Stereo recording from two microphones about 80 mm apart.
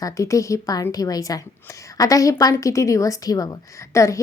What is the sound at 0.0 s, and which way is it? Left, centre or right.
A woman's voice, left.